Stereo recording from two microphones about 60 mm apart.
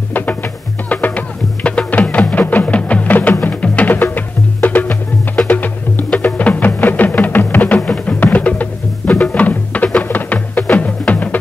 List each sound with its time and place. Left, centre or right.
0.1 s music: left